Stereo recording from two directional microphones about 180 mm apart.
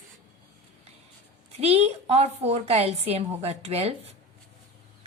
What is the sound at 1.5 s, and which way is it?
A woman's voice, 35° right (ahead or behind).